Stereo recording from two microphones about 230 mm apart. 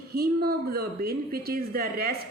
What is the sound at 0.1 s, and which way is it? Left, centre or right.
A woman's voice, right.